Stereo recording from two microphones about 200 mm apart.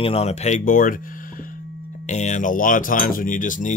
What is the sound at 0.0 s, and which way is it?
Speech, 30° left (ahead or behind).